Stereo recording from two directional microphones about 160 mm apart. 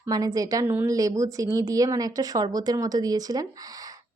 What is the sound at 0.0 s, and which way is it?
A woman's voice, 20° right (ahead or behind).